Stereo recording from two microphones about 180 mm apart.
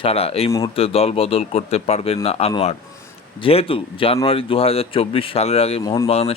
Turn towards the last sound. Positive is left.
turn(degrees=35)  # may be behind; listen again after turning